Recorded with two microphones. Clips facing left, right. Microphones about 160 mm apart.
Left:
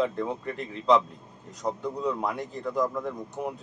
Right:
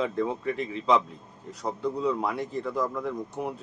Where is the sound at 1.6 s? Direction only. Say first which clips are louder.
Right 1 dB; 5° right (ahead or behind).